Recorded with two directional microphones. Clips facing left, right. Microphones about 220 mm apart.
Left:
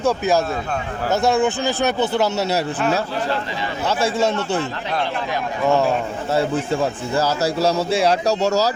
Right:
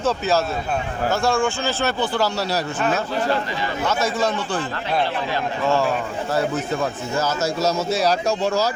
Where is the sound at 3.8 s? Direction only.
25° left (ahead or behind).